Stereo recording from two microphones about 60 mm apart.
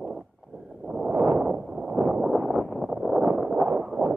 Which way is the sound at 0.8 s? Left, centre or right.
Right.